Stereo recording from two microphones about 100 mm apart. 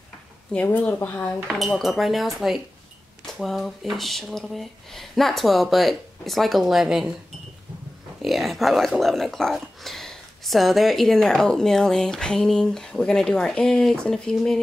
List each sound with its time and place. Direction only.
0.7 s speech: 20° left (ahead or behind)
1.5 s speech: centre (ahead or behind)
8.2 s speech: centre (ahead or behind)